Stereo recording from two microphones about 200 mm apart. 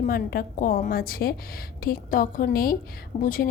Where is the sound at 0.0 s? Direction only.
50° left (ahead or behind).